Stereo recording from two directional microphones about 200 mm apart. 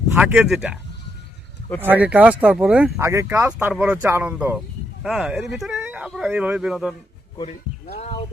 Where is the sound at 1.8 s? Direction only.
10° right (ahead or behind).